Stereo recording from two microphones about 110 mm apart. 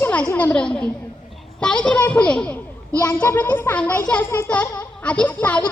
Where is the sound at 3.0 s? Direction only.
25° left (ahead or behind).